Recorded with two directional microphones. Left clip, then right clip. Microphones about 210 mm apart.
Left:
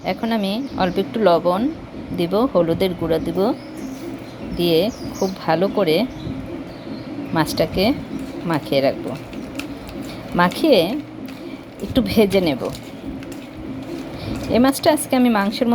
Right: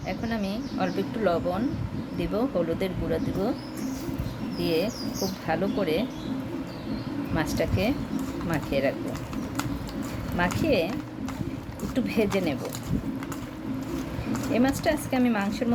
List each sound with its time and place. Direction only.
0.0 s speech: 25° left (ahead or behind)
4.6 s speech: 25° left (ahead or behind)
7.3 s speech: 25° left (ahead or behind)
10.3 s speech: 25° left (ahead or behind)
11.9 s speech: 25° left (ahead or behind)
14.5 s speech: 25° left (ahead or behind)